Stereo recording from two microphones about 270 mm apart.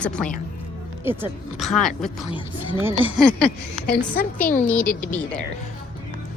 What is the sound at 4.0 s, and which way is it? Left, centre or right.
Speech, centre.